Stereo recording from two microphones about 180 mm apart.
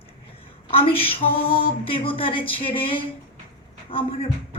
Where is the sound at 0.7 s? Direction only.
30° left (ahead or behind).